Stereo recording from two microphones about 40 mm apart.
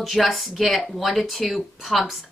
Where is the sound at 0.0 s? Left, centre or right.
Centre.